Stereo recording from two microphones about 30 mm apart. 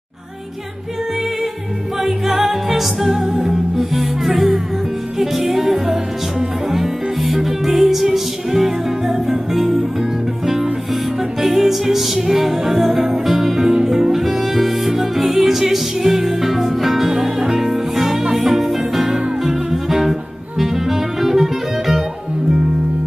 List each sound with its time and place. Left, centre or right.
2.0 s music: centre
17.1 s music: centre